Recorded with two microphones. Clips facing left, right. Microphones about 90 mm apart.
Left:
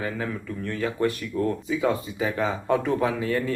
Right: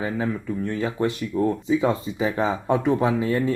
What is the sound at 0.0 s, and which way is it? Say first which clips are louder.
Speech: right 4 dB; 20° right (ahead or behind).